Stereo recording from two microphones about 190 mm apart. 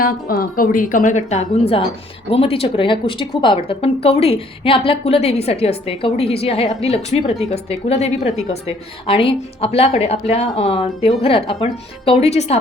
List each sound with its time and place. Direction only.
0.0 s a woman's voice: 50° left (ahead or behind); by 12.5 s 35° left (ahead or behind)